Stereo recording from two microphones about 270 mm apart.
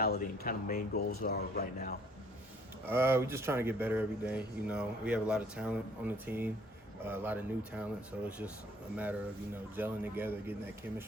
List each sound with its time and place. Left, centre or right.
0.0 s speech: left
2.8 s speech: centre
9.7 s speech: centre